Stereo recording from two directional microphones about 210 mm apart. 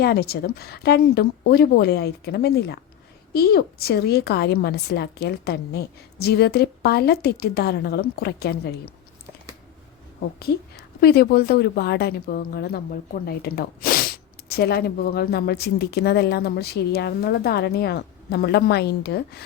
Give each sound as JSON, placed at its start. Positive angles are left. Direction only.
{"t": 0.0, "sound": "a woman's voice", "side_deg": 50}
{"t": 11.0, "sound": "a woman's voice", "side_deg": 50}